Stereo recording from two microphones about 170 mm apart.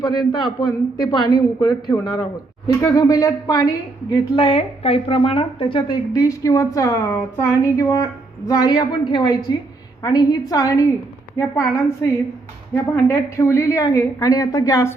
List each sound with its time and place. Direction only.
0.0 s a woman's voice: 25° left (ahead or behind)
12.7 s a woman's voice: 15° left (ahead or behind)